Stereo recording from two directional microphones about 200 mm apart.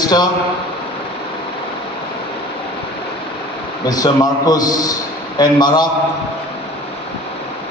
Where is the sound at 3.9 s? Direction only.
20° left (ahead or behind).